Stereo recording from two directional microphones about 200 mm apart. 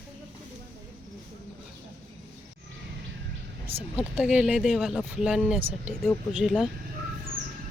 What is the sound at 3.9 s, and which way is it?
Speech, centre (ahead or behind).